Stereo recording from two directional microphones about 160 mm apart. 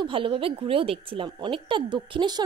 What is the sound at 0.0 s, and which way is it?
A woman's voice, 35° right (ahead or behind).